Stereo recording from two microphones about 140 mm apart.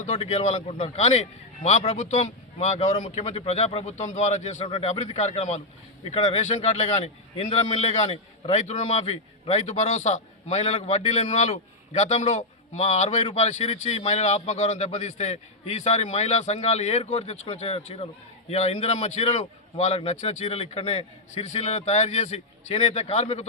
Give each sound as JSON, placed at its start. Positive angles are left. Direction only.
{"t": 0.0, "sound": "a man's voice", "side_deg": 55}
{"t": 4.6, "sound": "speech", "side_deg": 40}
{"t": 4.9, "sound": "a man's voice", "side_deg": 50}